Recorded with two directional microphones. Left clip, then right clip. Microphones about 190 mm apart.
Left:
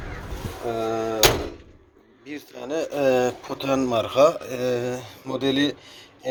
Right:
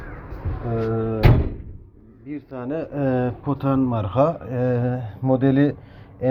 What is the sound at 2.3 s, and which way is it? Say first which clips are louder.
A man's voice: right 2 dB; 30° left (ahead or behind).